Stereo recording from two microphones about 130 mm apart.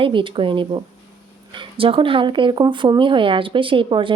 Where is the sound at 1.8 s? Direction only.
45° right (ahead or behind).